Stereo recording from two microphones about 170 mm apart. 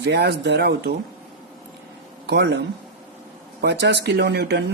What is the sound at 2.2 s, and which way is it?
Speech, 80° right.